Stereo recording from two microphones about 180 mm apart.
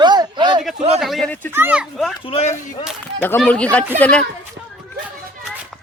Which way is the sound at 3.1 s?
10° left (ahead or behind).